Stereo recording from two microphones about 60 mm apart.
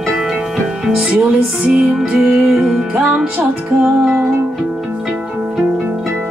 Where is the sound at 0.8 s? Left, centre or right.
Centre.